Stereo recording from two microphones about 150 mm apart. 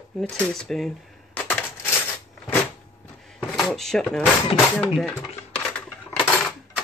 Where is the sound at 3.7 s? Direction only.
5° left (ahead or behind).